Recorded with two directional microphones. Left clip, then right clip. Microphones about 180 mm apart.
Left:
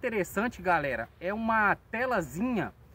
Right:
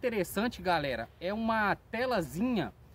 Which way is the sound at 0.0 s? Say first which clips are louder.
Left 2 dB; 10° right (ahead or behind).